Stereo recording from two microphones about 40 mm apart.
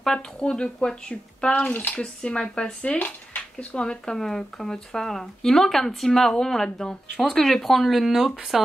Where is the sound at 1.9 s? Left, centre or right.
Left; by 8.0 s centre.